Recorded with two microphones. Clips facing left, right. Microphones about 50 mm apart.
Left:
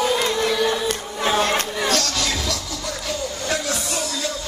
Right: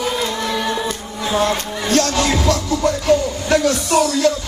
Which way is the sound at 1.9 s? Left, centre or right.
Right.